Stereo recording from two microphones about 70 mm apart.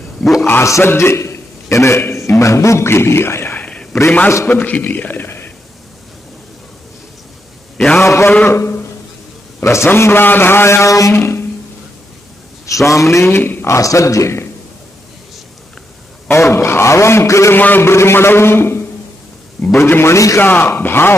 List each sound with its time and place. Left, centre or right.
0.4 s a man's voice: left
3.5 s a sound: centre
4.5 s a man's voice: left
7.7 s a sound: centre
8.0 s a man's voice: left
11.1 s a sound: left
12.6 s a man's voice: left
13.7 s a man's voice: left
16.3 s a man's voice: left
17.6 s a man's voice: left
17.8 s a man's voice: left